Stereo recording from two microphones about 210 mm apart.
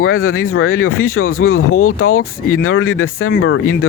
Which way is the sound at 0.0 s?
80° left.